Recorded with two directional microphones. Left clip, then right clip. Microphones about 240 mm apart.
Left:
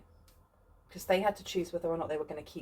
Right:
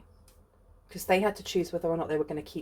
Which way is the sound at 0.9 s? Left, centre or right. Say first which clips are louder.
Right 3 dB; right.